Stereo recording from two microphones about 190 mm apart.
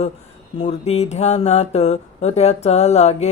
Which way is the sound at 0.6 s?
35° left (ahead or behind).